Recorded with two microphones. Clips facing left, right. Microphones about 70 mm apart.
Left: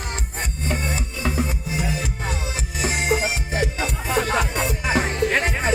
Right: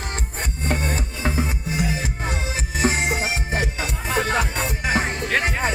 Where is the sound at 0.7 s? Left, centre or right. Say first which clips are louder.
Right 2 dB; right.